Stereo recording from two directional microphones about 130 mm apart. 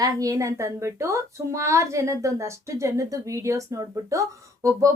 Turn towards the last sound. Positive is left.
turn(degrees=-25)  # may be behind; listen again after turning